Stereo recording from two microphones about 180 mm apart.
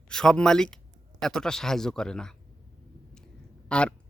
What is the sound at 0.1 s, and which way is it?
Speech, 5° left (ahead or behind).